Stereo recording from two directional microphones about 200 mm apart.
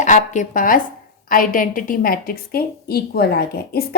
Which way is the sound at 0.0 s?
40° left (ahead or behind).